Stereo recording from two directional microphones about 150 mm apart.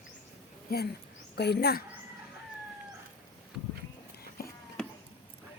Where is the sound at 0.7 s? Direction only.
90° left.